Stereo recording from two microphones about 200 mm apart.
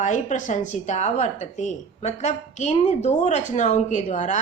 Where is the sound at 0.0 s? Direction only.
40° left (ahead or behind).